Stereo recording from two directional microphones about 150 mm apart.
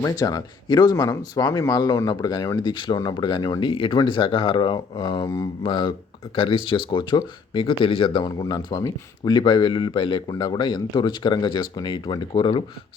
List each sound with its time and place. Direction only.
0.0 s speech: 25° left (ahead or behind)